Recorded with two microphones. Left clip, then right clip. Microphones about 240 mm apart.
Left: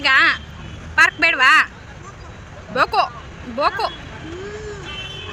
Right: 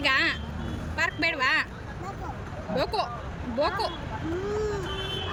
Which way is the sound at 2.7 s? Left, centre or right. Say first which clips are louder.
Left 11 dB; centre.